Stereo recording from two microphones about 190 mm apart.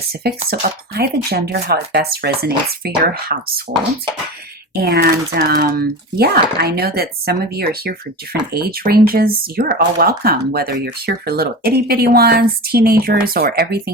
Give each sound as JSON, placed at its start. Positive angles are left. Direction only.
{"t": 0.2, "sound": "speech", "side_deg": -55}